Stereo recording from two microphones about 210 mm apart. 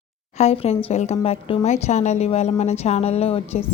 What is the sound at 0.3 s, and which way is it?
A woman's voice, 30° left (ahead or behind).